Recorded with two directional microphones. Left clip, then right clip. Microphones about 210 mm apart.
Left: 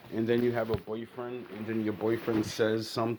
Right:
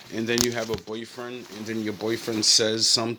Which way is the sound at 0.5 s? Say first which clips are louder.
Right 2 dB; 30° right (ahead or behind).